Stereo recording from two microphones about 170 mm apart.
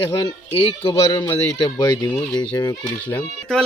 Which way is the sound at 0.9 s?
25° left (ahead or behind).